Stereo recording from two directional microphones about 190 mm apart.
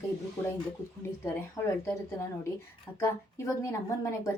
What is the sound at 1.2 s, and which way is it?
A woman's voice, 15° left (ahead or behind).